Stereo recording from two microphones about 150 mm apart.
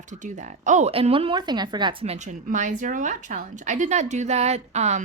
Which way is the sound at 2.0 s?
50° right (ahead or behind).